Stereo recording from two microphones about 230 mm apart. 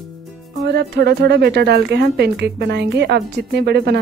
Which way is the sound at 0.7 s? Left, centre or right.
Right.